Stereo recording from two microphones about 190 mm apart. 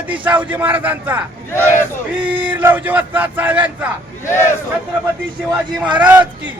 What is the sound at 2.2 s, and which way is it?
Speech, 10° right (ahead or behind).